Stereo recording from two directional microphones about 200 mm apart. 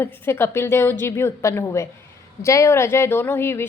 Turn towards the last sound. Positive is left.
turn(degrees=10)  # may be behind; listen again after turning